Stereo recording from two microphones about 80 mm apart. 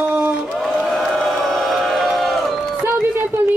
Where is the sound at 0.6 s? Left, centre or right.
Centre.